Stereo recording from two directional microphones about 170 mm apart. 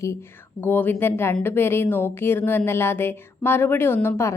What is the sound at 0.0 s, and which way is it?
A woman's voice, 15° left (ahead or behind).